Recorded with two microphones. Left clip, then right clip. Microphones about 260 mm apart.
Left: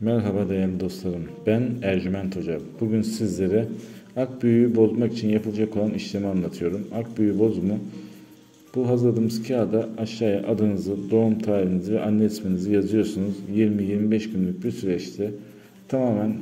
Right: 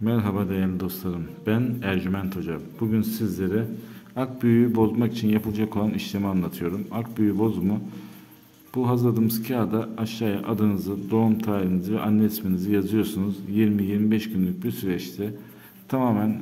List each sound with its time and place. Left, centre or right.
0.0 s speech: centre
8.8 s speech: centre